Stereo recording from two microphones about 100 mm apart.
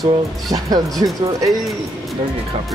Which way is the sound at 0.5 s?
40° right (ahead or behind).